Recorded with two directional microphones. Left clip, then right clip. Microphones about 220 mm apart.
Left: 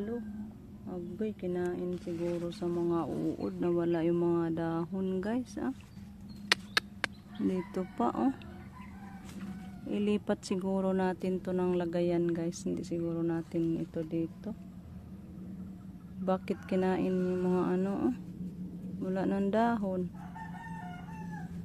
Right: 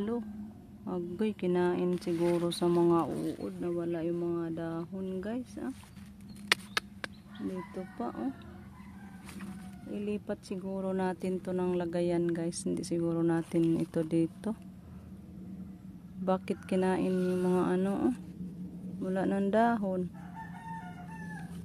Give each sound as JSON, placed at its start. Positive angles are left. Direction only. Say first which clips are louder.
{"t": 0.8, "sound": "speech", "louder": "right 4 dB", "side_deg": -30}
{"t": 3.3, "sound": "speech", "louder": "left 3 dB", "side_deg": 5}
{"t": 7.7, "sound": "speech", "louder": "left 6 dB", "side_deg": 15}
{"t": 9.8, "sound": "speech", "louder": "left 5 dB", "side_deg": 10}
{"t": 16.3, "sound": "speech", "louder": "right 1 dB", "side_deg": -10}